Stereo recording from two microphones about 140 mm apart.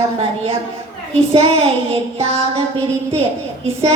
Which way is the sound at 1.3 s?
45° right (ahead or behind).